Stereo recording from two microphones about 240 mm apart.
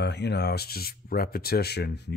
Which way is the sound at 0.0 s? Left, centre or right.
Left.